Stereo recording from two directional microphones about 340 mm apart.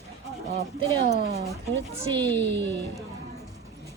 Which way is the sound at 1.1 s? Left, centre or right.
Centre.